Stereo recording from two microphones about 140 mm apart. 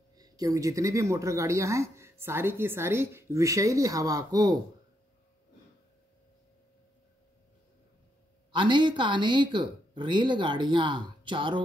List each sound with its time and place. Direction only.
0.2 s speech: 25° right (ahead or behind)
8.5 s speech: 35° right (ahead or behind)